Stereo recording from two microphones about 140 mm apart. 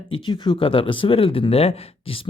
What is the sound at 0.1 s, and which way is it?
Speech, 35° left (ahead or behind).